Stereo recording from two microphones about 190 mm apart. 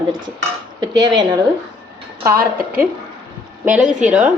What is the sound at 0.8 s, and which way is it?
Cutlery, 20° right (ahead or behind).